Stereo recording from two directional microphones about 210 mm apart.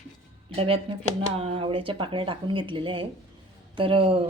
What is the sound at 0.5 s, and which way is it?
A woman's voice, 25° right (ahead or behind).